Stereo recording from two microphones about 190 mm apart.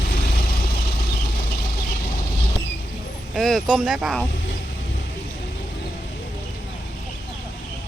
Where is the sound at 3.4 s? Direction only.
Centre (ahead or behind).